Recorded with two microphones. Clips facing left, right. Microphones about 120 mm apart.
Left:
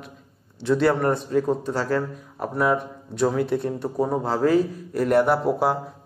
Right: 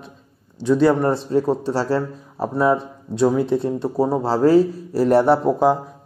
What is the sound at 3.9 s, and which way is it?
Speech, 35° right (ahead or behind).